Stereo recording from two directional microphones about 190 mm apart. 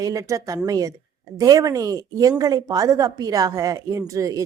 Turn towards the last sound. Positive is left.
turn(degrees=-15)  # may be behind; listen again after turning